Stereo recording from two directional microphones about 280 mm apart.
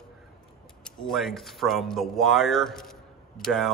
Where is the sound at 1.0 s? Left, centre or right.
Centre.